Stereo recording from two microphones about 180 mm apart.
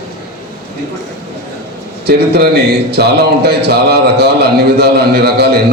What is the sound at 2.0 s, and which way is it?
A man's voice, 65° right (ahead or behind).